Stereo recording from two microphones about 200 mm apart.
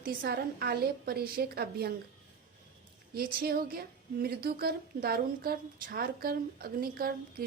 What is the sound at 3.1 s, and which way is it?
A woman's voice, 50° right (ahead or behind).